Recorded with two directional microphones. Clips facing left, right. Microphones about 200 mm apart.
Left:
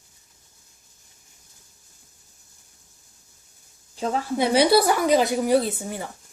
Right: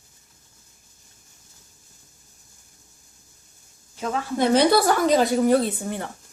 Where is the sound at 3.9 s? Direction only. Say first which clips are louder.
Left 2 dB; 30° left (ahead or behind).